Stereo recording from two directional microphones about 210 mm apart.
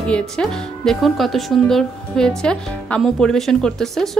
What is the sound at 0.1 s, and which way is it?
A woman's voice, centre (ahead or behind).